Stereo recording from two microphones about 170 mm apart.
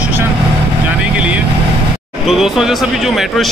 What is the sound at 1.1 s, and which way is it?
Speech, 5° right (ahead or behind).